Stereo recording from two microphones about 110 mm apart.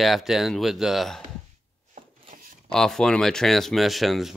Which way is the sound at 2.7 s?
5° left (ahead or behind).